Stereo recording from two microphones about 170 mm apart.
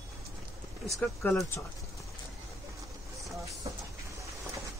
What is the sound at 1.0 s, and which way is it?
Speech, 10° left (ahead or behind).